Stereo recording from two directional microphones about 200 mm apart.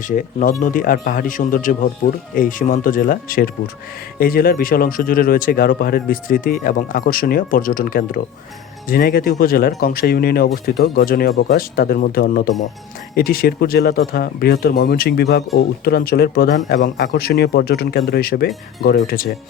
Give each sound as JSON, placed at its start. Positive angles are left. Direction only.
{"t": 0.0, "sound": "speech", "side_deg": 40}